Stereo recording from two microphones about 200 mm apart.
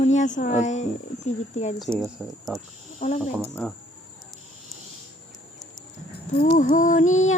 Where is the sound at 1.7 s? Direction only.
Centre (ahead or behind).